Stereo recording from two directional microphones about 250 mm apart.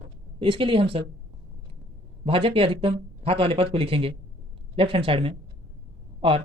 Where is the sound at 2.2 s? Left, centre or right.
Right.